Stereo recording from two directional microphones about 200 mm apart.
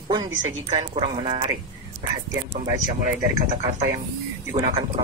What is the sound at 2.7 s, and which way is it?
Speech, 40° right (ahead or behind).